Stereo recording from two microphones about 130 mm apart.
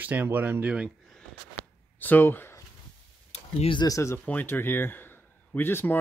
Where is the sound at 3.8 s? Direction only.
25° left (ahead or behind).